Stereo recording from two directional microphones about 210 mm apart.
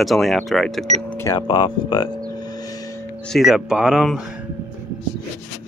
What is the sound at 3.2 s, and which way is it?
Speech, centre (ahead or behind).